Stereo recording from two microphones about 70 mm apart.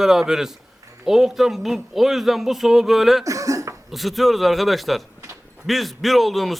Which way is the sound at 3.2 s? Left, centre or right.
Right.